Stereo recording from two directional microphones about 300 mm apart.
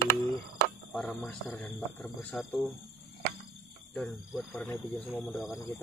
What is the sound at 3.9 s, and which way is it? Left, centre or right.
Speech, centre.